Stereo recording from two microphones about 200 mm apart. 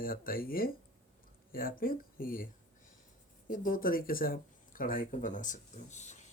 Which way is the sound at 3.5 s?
45° left (ahead or behind).